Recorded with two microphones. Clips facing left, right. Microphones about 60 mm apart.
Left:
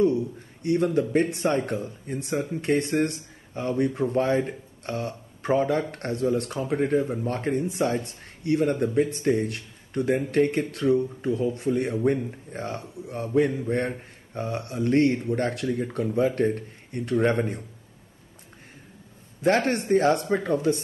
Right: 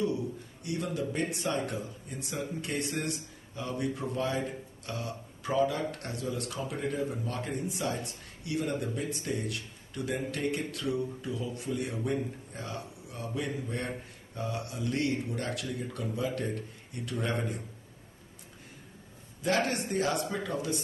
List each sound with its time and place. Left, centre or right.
0.0 s a man's voice: left
19.4 s a man's voice: left